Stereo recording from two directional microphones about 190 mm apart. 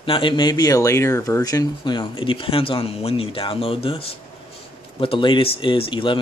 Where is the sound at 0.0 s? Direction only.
25° left (ahead or behind).